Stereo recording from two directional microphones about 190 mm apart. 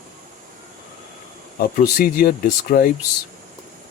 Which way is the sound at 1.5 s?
50° left (ahead or behind).